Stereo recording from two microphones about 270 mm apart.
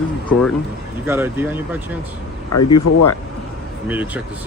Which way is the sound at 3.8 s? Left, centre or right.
Centre.